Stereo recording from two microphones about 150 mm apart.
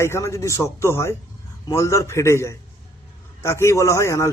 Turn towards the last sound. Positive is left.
turn(degrees=20)  # may be behind; listen again after turning